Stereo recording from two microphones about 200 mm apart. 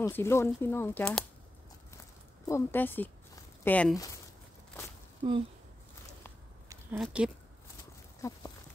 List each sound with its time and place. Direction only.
0.0 s speech: 10° left (ahead or behind)
2.4 s speech: 10° left (ahead or behind)
5.2 s speech: 25° right (ahead or behind)
7.0 s speech: 5° right (ahead or behind)
8.2 s a sound: 15° left (ahead or behind)